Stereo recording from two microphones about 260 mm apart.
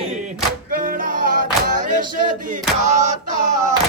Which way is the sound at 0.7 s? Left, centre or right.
Right.